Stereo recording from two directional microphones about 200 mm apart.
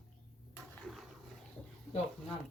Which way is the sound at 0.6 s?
Centre (ahead or behind).